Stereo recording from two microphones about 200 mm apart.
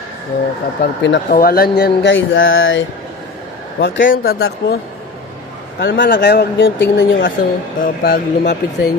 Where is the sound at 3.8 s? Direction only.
70° left (ahead or behind).